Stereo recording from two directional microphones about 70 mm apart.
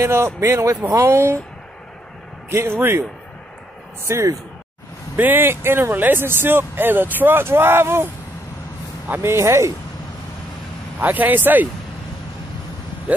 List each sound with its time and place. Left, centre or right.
0.0 s speech: right
2.5 s speech: right
4.1 s speech: right
5.1 s speech: right
11.0 s speech: right